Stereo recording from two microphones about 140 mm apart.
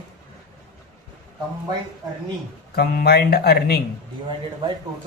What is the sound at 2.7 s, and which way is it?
Speech, 90° left.